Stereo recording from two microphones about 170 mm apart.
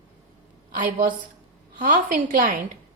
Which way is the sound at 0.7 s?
55° right (ahead or behind).